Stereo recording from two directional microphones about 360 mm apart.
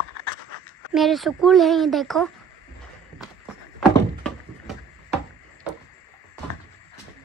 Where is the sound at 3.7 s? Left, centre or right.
Centre.